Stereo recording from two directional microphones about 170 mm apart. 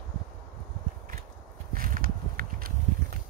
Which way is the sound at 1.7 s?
55° right (ahead or behind).